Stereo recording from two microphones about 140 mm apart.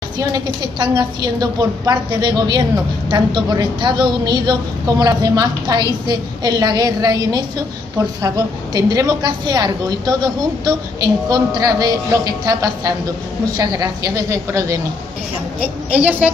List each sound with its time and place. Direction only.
0.2 s a woman's voice: 30° right (ahead or behind)
8.7 s a woman's voice: 30° right (ahead or behind)
15.6 s a woman's voice: 10° right (ahead or behind)